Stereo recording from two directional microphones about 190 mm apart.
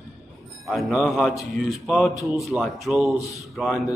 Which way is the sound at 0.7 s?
Centre (ahead or behind).